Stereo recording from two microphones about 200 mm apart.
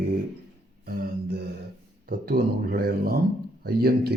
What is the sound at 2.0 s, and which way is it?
Speech, 50° right (ahead or behind).